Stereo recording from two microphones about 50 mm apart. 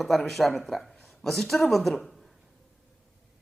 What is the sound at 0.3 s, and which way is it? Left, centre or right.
Speech, centre.